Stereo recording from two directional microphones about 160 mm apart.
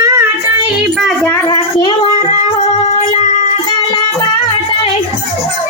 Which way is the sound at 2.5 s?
45° left (ahead or behind).